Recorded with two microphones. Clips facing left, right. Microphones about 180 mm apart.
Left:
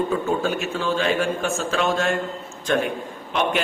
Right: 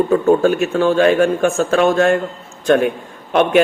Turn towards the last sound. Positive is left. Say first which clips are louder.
# right 8 dB
turn(degrees=-55)  # may be behind; listen again after turning